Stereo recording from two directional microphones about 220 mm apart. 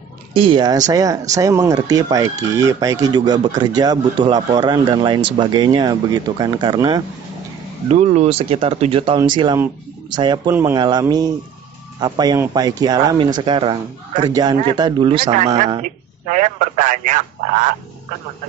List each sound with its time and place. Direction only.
0.3 s speech: 25° right (ahead or behind)
7.9 s speech: 30° right (ahead or behind)
15.3 s speech: 30° right (ahead or behind)